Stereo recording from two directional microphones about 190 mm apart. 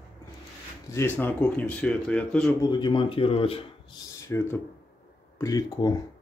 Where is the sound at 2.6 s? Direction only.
25° left (ahead or behind).